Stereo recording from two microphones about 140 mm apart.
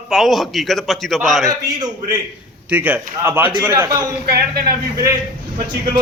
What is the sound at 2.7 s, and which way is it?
A man's voice, 10° right (ahead or behind).